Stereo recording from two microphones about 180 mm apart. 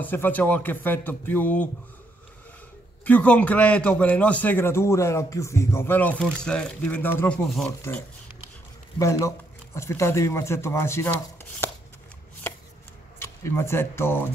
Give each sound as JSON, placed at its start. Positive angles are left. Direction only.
{"t": 0.0, "sound": "a man's voice", "side_deg": 10}
{"t": 3.1, "sound": "a man's voice", "side_deg": 10}
{"t": 8.9, "sound": "a man's voice", "side_deg": 15}
{"t": 13.2, "sound": "speech", "side_deg": 15}